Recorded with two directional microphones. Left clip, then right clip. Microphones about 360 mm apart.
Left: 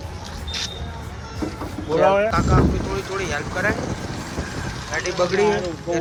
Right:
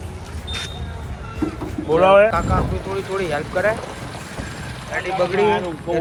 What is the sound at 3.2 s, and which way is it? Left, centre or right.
Speech, centre.